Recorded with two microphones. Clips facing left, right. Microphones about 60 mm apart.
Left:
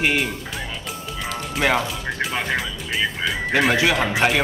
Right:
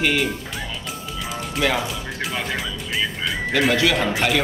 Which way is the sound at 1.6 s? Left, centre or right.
Left.